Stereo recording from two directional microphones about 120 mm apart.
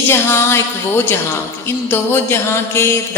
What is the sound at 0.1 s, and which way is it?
Mantra, 20° left (ahead or behind).